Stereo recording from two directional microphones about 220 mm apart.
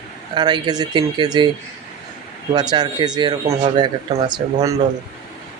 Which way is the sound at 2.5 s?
20° right (ahead or behind).